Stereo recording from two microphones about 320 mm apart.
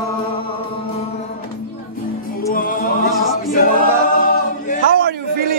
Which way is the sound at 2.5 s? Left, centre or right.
Left.